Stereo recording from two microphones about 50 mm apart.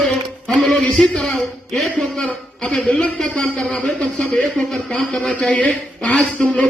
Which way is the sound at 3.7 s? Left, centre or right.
Centre.